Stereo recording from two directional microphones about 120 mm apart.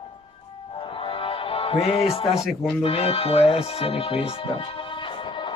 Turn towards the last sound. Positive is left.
turn(degrees=40)  # may be behind; listen again after turning